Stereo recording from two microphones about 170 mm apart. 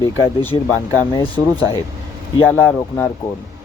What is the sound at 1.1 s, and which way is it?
Speech, 30° left (ahead or behind).